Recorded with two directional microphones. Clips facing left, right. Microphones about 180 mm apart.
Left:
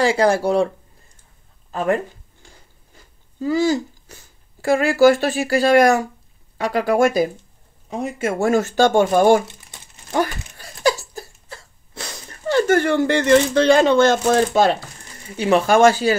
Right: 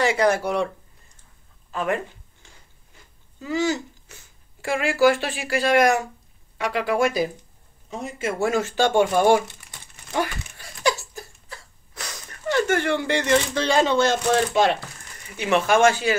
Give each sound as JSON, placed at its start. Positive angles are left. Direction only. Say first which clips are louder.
{"t": 0.0, "sound": "speech", "louder": "left 4 dB", "side_deg": 30}
{"t": 1.7, "sound": "speech", "louder": "left 5 dB", "side_deg": 40}
{"t": 3.3, "sound": "speech", "louder": "left 6 dB", "side_deg": 35}
{"t": 10.8, "sound": "a sound", "louder": "left 4 dB", "side_deg": 35}